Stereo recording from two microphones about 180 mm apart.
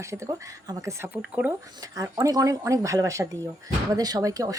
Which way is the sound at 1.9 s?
20° right (ahead or behind).